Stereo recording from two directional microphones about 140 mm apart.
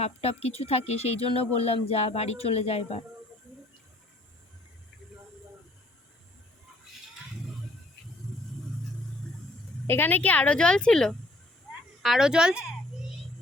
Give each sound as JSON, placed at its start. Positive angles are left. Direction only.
{"t": 0.0, "sound": "speech", "side_deg": 45}
{"t": 9.8, "sound": "a woman's voice", "side_deg": 15}
{"t": 11.7, "sound": "a sound", "side_deg": -5}